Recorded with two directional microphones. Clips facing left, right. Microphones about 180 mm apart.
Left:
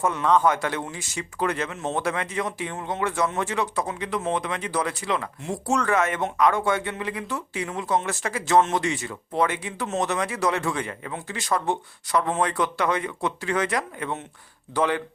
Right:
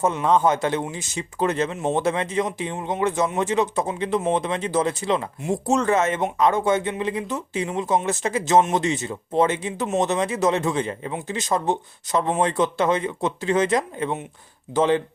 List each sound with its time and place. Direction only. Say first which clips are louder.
0.0 s speech: right 2 dB; 25° right (ahead or behind)